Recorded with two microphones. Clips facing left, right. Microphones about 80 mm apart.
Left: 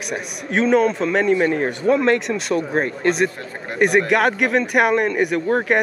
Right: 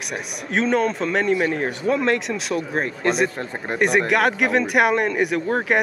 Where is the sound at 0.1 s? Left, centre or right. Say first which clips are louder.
Left 2 dB; centre.